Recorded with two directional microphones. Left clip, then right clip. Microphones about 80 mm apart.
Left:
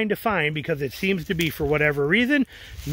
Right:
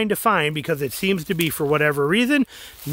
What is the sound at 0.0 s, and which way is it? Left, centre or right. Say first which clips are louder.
Speech: right 4 dB; right.